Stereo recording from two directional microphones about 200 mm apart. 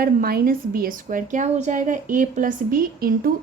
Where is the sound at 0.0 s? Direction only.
45° right (ahead or behind).